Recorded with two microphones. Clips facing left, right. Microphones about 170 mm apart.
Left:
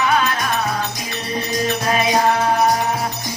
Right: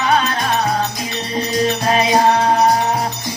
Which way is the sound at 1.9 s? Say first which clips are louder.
Right 2 dB; 35° right (ahead or behind).